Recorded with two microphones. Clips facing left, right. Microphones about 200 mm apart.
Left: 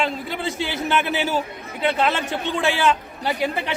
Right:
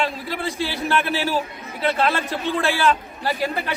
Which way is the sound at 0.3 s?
20° left (ahead or behind).